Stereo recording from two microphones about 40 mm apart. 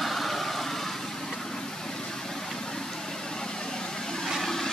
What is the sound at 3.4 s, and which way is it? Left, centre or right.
Vehicle, centre.